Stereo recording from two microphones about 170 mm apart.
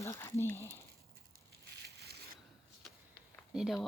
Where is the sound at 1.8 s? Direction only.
80° right.